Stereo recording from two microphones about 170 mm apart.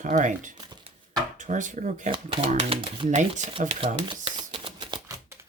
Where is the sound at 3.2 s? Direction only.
45° right (ahead or behind).